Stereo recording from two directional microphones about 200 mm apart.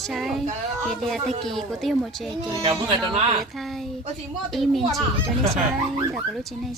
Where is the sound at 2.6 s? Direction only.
25° right (ahead or behind).